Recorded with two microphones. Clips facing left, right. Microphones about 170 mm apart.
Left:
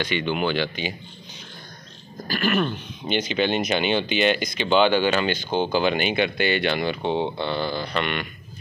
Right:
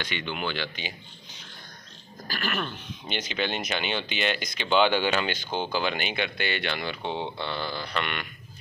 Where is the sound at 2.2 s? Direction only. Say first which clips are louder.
Left 9 dB; 5° left (ahead or behind).